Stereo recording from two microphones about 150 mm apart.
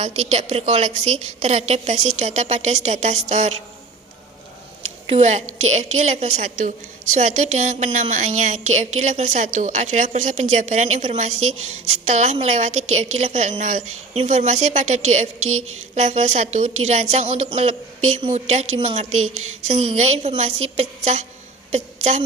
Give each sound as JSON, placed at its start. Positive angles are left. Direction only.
{"t": 0.0, "sound": "a woman's voice", "side_deg": -45}
{"t": 5.0, "sound": "a woman's voice", "side_deg": -45}
{"t": 21.7, "sound": "a sound", "side_deg": -45}